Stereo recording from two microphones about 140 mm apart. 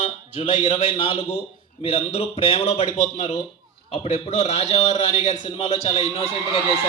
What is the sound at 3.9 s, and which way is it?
Speech, 45° left (ahead or behind).